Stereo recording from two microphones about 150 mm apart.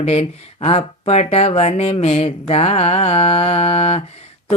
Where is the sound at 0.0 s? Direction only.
45° left (ahead or behind).